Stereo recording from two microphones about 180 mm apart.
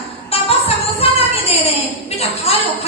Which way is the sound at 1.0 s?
35° left (ahead or behind).